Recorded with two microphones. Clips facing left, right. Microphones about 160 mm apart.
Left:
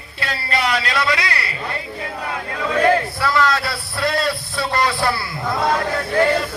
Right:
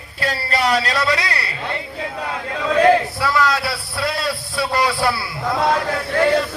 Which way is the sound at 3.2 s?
10° right (ahead or behind).